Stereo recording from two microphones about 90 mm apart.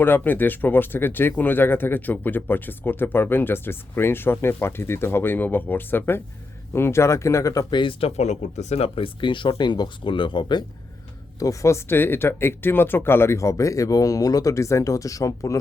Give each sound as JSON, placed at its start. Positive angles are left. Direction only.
{"t": 0.0, "sound": "speech", "side_deg": 20}
{"t": 7.7, "sound": "speech", "side_deg": 70}
{"t": 8.8, "sound": "speech", "side_deg": 85}
{"t": 11.3, "sound": "speech", "side_deg": 35}